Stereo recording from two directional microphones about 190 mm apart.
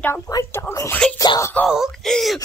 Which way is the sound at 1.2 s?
20° left (ahead or behind).